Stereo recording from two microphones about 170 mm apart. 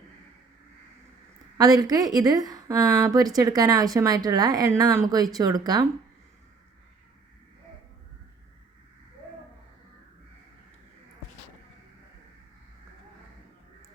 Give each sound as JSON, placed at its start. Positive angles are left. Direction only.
{"t": 1.5, "sound": "a woman's voice", "side_deg": -20}